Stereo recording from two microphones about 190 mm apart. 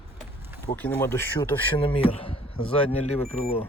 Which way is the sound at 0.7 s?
10° left (ahead or behind).